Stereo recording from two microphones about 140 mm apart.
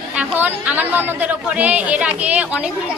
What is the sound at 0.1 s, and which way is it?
A man's voice, 10° right (ahead or behind).